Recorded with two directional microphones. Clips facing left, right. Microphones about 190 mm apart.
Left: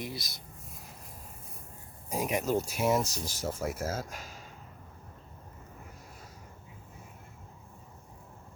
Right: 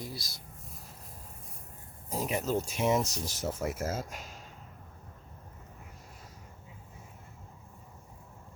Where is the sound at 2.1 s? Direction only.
15° left (ahead or behind).